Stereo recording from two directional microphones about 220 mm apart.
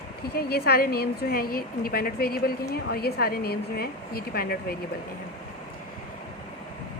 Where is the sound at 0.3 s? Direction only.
45° left (ahead or behind).